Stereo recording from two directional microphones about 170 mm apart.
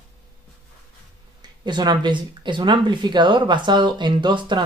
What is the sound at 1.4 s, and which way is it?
Speech, 25° right (ahead or behind).